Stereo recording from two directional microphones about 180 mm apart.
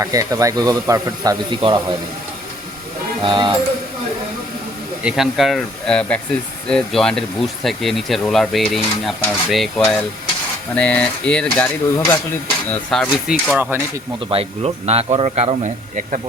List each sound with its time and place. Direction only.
0.0 s speech: 20° right (ahead or behind)
3.2 s speech: 25° right (ahead or behind)
5.0 s speech: centre (ahead or behind)
10.8 s a sound: 5° left (ahead or behind)
12.9 s speech: centre (ahead or behind)
13.6 s speech: 10° right (ahead or behind)
14.3 s speech: 35° right (ahead or behind)